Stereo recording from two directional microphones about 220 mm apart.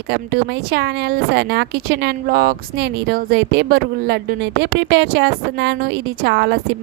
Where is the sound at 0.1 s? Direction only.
50° right (ahead or behind).